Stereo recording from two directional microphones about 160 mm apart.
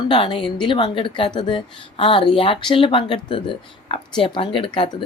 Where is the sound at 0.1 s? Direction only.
30° left (ahead or behind).